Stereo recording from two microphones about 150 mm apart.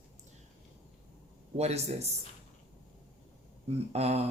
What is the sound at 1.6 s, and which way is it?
Speech, 45° right (ahead or behind).